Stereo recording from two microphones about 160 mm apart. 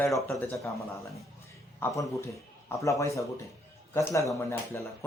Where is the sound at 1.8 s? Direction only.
20° left (ahead or behind).